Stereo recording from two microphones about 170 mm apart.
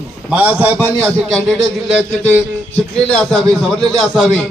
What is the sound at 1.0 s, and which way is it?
Speech, 5° left (ahead or behind).